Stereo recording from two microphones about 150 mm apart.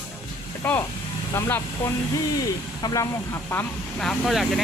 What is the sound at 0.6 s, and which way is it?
Speech, 10° left (ahead or behind).